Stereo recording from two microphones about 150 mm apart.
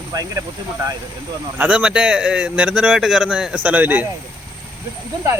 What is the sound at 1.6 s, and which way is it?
A man's voice, 10° right (ahead or behind).